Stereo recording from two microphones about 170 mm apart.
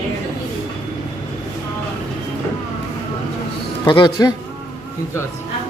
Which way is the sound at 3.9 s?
25° left (ahead or behind).